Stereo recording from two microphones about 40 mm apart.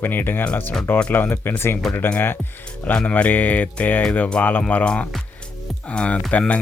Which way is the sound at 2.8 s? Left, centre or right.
Left.